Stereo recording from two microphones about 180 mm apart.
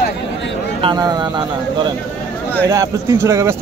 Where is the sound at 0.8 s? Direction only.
25° right (ahead or behind).